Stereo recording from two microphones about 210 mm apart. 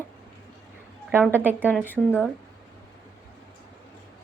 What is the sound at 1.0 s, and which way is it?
Speech, 5° right (ahead or behind).